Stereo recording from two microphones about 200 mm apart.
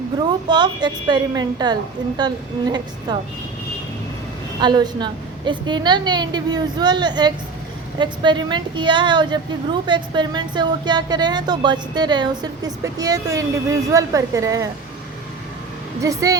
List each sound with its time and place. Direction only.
0.4 s speech: 20° right (ahead or behind)
4.6 s speech: 20° right (ahead or behind)
16.0 s speech: 15° right (ahead or behind)